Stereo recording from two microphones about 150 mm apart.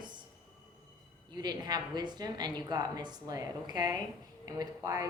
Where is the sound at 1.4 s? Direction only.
25° right (ahead or behind).